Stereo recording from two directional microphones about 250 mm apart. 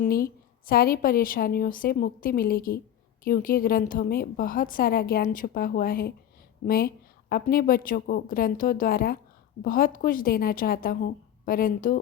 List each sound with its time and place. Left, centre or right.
0.0 s a woman's voice: left